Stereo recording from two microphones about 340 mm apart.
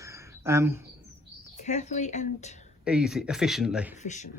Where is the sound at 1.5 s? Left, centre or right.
Left.